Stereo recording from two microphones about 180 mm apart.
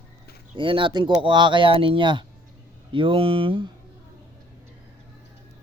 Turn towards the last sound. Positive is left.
turn(degrees=-30)  # may be behind; listen again after turning